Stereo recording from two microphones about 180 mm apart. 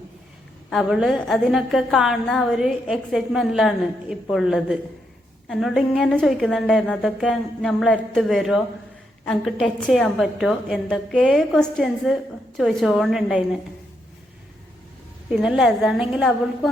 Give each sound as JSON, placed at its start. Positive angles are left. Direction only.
{"t": 0.7, "sound": "a woman's voice", "side_deg": -5}
{"t": 15.3, "sound": "a woman's voice", "side_deg": -5}